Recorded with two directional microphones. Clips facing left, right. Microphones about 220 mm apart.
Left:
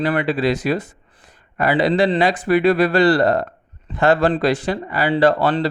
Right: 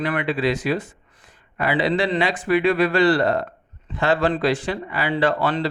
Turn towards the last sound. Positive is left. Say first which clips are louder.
# left 5 dB
turn(degrees=40)  # may be behind; listen again after turning